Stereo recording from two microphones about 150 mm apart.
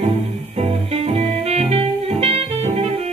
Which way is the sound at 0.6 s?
45° right (ahead or behind).